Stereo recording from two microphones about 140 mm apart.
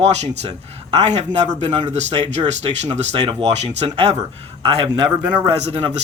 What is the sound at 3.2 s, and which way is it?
Speech, 35° right (ahead or behind).